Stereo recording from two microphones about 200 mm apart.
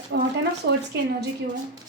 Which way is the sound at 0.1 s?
65° right (ahead or behind).